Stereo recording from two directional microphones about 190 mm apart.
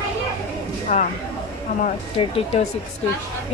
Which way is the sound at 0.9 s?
35° left (ahead or behind).